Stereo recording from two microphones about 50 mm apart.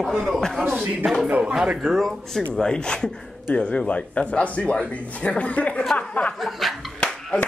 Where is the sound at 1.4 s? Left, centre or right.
Centre.